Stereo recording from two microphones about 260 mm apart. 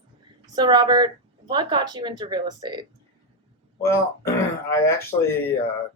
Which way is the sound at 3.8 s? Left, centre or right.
Centre.